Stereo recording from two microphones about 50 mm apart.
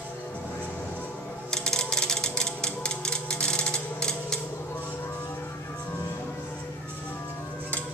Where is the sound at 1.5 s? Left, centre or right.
Centre.